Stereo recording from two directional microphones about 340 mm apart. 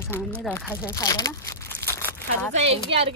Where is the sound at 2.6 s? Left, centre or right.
Centre.